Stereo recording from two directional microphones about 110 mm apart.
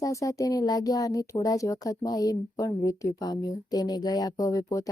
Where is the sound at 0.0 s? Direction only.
30° left (ahead or behind).